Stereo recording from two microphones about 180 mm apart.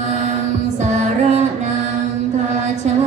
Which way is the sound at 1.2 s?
40° right (ahead or behind).